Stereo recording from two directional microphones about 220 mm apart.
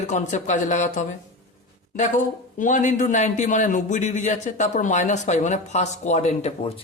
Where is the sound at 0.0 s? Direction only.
30° left (ahead or behind).